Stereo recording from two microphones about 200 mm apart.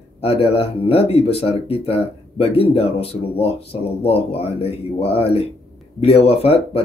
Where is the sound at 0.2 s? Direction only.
30° left (ahead or behind).